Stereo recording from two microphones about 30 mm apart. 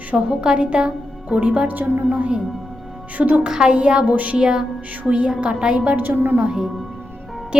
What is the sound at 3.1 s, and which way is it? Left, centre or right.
Speech, right.